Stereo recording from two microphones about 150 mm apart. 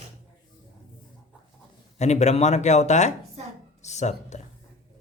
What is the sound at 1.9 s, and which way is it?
A man's voice, 50° left (ahead or behind).